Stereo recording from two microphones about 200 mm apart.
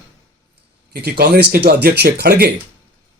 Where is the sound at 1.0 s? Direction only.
50° right (ahead or behind).